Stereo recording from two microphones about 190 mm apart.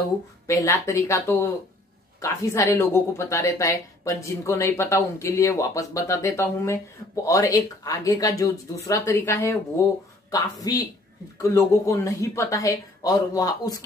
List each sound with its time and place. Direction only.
0.5 s speech: 15° left (ahead or behind)